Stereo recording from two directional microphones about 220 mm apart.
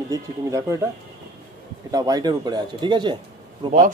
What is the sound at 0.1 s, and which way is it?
Speech, 15° right (ahead or behind).